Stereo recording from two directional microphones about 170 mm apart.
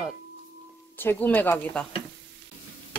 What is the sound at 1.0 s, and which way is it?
Speech, 10° left (ahead or behind).